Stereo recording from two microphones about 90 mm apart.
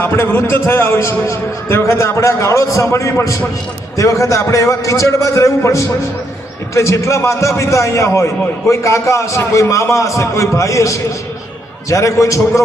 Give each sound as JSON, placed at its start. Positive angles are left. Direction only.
{"t": 0.0, "sound": "a man's voice", "side_deg": 25}